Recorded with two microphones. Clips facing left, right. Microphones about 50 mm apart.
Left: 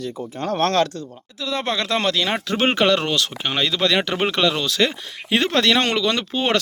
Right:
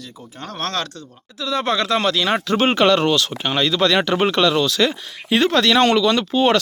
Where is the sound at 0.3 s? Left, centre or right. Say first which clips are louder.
Left 6 dB; left.